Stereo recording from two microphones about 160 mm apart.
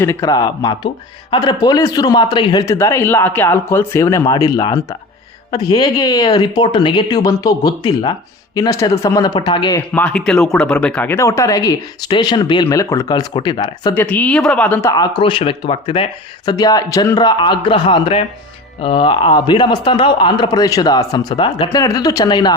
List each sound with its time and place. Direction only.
0.0 s a man's voice: 20° left (ahead or behind)
9.9 s a man's voice: 10° left (ahead or behind); by 13.9 s 25° left (ahead or behind)
13.9 s speech: 10° left (ahead or behind)
14.9 s a man's voice: 25° left (ahead or behind)
21.7 s a man's voice: 20° left (ahead or behind)